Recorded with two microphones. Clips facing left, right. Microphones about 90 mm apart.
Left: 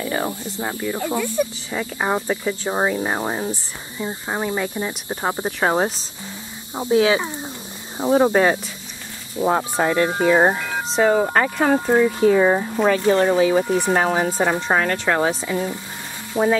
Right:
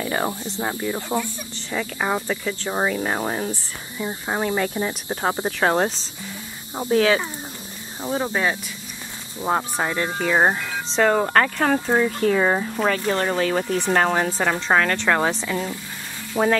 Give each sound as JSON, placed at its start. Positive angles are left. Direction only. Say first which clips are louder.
{"t": 0.0, "sound": "speech", "louder": "even", "side_deg": -5}
{"t": 1.7, "sound": "speech", "louder": "left 2 dB", "side_deg": 10}
{"t": 8.0, "sound": "speech", "louder": "left 8 dB", "side_deg": 35}
{"t": 9.4, "sound": "speech", "louder": "left 4 dB", "side_deg": 5}
{"t": 16.3, "sound": "speech", "louder": "left 1 dB", "side_deg": -5}